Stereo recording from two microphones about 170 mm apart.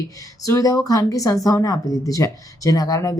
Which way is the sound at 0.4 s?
20° left (ahead or behind).